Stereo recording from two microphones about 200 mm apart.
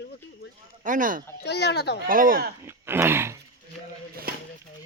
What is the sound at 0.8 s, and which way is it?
Speech, 40° right (ahead or behind).